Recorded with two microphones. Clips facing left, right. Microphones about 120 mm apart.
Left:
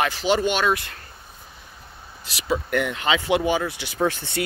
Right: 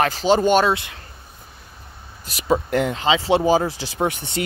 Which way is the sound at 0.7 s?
20° right (ahead or behind).